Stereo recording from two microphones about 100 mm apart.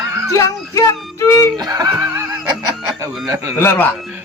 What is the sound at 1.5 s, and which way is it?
Music, 40° right (ahead or behind).